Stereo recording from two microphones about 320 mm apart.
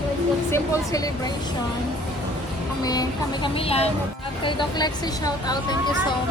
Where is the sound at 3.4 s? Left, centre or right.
Centre.